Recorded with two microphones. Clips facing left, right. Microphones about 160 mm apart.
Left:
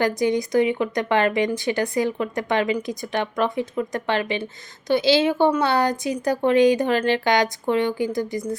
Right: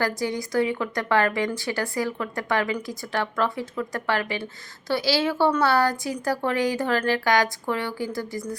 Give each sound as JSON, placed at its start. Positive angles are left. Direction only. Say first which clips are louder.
{"t": 0.0, "sound": "a woman's voice", "louder": "left 5 dB", "side_deg": 20}